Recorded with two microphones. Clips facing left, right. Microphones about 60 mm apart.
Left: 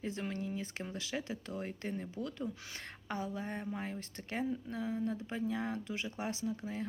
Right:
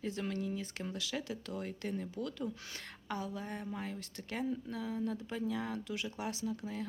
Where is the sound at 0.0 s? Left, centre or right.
Left.